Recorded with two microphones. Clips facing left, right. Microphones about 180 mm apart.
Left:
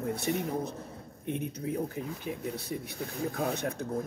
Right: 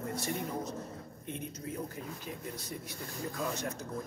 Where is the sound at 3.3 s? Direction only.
60° left (ahead or behind).